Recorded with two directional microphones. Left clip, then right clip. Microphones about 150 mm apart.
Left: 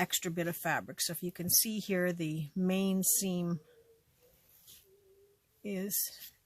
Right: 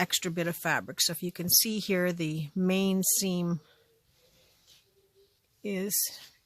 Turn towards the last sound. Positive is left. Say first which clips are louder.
# right 6 dB
turn(degrees=-40)  # may be behind; listen again after turning